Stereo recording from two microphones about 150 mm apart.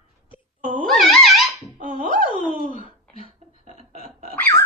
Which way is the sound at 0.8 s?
Centre (ahead or behind).